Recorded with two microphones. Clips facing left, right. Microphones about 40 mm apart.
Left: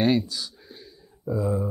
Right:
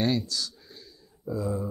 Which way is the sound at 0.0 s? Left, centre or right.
Centre.